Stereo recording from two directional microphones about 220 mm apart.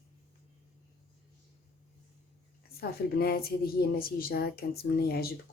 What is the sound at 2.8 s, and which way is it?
Speech, 45° left (ahead or behind).